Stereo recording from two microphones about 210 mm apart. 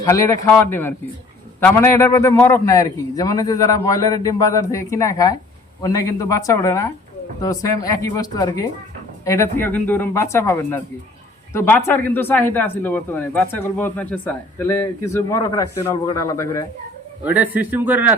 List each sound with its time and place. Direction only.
0.0 s speech: 15° left (ahead or behind)
17.2 s speech: 5° right (ahead or behind)